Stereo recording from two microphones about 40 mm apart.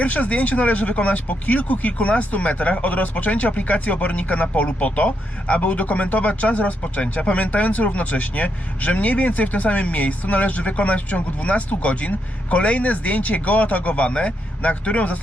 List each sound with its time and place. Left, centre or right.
0.0 s speech: left